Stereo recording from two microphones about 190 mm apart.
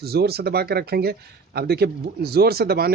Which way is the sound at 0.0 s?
55° right (ahead or behind).